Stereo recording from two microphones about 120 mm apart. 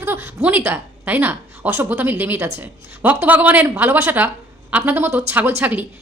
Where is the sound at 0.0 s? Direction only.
20° right (ahead or behind).